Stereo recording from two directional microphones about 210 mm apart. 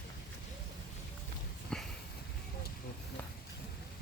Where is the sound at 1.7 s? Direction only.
5° left (ahead or behind).